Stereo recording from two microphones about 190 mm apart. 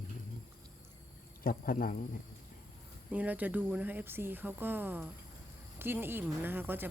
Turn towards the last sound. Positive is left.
turn(degrees=-10)  # may be behind; listen again after turning